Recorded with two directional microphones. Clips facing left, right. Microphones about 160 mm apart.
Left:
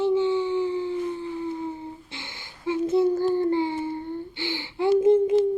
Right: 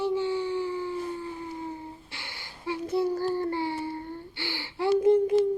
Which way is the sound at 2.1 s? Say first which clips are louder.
Left 3 dB; 20° left (ahead or behind).